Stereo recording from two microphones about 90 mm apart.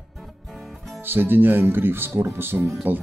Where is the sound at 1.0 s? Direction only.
25° right (ahead or behind).